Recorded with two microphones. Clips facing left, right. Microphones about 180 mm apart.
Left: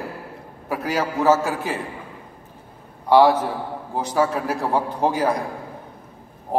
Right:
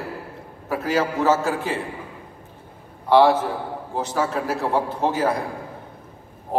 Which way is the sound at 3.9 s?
15° left (ahead or behind).